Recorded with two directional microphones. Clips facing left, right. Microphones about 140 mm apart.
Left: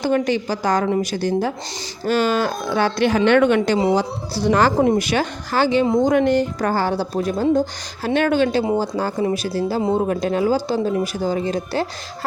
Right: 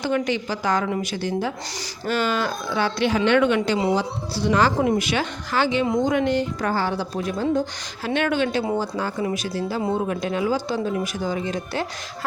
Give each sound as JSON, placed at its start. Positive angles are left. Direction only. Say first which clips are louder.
{"t": 0.0, "sound": "a woman's voice", "louder": "left 4 dB", "side_deg": 40}